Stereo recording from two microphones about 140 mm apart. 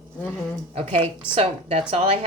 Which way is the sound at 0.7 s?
45° right (ahead or behind).